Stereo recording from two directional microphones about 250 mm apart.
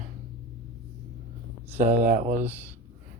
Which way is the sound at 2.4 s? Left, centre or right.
Centre.